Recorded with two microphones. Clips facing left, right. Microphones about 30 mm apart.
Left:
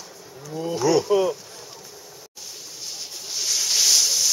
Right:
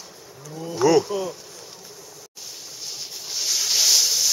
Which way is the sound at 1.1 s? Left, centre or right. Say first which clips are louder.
Left 7 dB; left.